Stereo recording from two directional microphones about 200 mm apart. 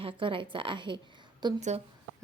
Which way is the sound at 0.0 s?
25° right (ahead or behind).